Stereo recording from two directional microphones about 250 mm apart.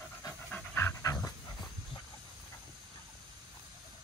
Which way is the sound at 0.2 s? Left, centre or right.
Centre.